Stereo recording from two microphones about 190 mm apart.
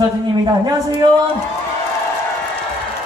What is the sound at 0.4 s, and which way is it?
Speech, 20° right (ahead or behind).